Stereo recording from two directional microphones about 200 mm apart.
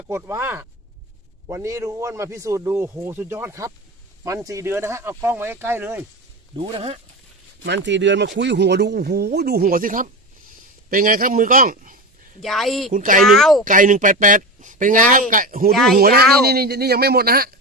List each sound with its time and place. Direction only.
0.0 s speech: 10° right (ahead or behind)
6.6 s speech: 25° right (ahead or behind)
7.6 s speech: 60° right (ahead or behind); by 11.9 s 45° right (ahead or behind)
12.4 s speech: centre (ahead or behind)
12.9 s speech: 40° right (ahead or behind)
13.2 s speech: centre (ahead or behind)
13.7 s speech: 40° right (ahead or behind)
15.7 s speech: centre (ahead or behind)
16.0 s speech: 50° right (ahead or behind)